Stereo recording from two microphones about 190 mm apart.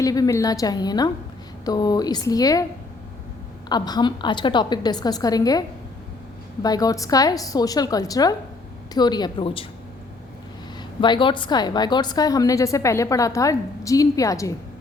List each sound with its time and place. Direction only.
0.0 s a woman's voice: 20° left (ahead or behind)
3.7 s a woman's voice: 20° left (ahead or behind)
10.8 s a woman's voice: 25° left (ahead or behind)